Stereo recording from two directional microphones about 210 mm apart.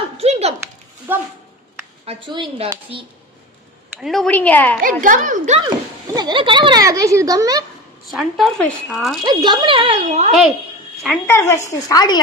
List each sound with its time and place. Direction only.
0.2 s a sound: 30° right (ahead or behind)
1.1 s speech: 10° right (ahead or behind)
2.0 s speech: 25° right (ahead or behind)
4.0 s a woman's voice: centre (ahead or behind)
4.8 s a woman's voice: 40° right (ahead or behind)
6.1 s speech: 20° right (ahead or behind)
8.0 s speech: centre (ahead or behind)
9.2 s speech: 20° right (ahead or behind)
11.0 s speech: 5° left (ahead or behind)
11.3 s a woman's voice: 15° left (ahead or behind)